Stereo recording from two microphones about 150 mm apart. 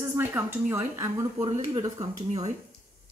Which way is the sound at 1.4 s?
35° right (ahead or behind).